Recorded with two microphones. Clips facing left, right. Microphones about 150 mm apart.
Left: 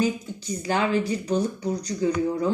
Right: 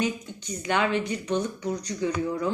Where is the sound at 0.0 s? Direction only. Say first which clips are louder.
Left 4 dB; 35° left (ahead or behind).